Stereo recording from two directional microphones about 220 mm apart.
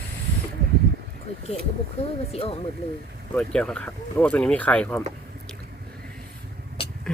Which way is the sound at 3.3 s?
5° left (ahead or behind).